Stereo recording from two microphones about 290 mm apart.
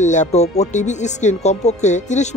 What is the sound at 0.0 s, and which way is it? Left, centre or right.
Speech, left.